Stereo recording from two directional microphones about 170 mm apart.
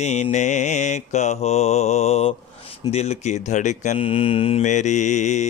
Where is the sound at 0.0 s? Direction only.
40° left (ahead or behind).